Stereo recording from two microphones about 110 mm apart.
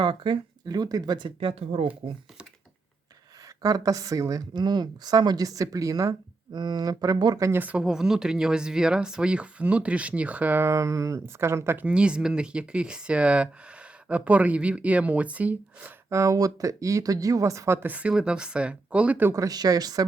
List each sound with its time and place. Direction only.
0.0 s speech: 45° right (ahead or behind)
1.4 s speech: 60° right (ahead or behind)
3.6 s speech: 35° right (ahead or behind)
7.6 s speech: 10° right (ahead or behind)
11.9 s speech: 10° right (ahead or behind)
16.0 s speech: 25° right (ahead or behind)
17.8 s speech: 10° right (ahead or behind)
19.3 s speech: 35° right (ahead or behind)